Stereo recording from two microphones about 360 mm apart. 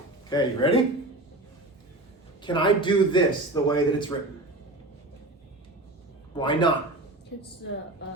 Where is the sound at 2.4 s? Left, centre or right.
Centre.